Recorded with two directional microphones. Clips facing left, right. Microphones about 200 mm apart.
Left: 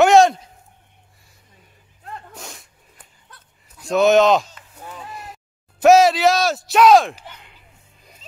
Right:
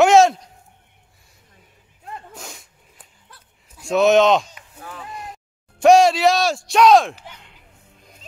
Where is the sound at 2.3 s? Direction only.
Centre (ahead or behind).